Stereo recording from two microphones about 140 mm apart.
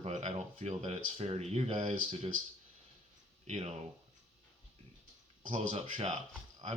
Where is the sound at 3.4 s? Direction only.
50° right (ahead or behind).